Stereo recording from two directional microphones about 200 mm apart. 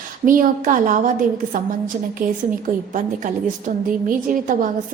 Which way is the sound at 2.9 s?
40° right (ahead or behind).